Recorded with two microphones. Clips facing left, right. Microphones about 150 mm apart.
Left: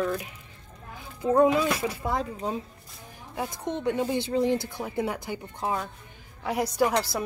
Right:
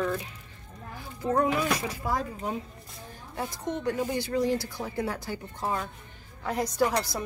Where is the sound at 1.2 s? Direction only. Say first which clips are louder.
Left 5 dB; 20° left (ahead or behind).